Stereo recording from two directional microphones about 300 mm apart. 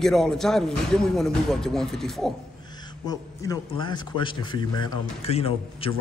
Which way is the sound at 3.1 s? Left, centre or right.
Centre.